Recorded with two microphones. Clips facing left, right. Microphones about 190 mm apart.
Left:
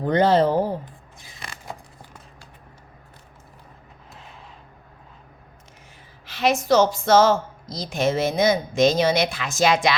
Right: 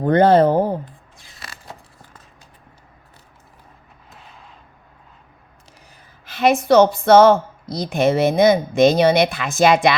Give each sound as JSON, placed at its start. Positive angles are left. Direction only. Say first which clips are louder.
{"t": 0.0, "sound": "speech", "louder": "right 5 dB", "side_deg": -55}
{"t": 6.2, "sound": "speech", "louder": "right 5 dB", "side_deg": -55}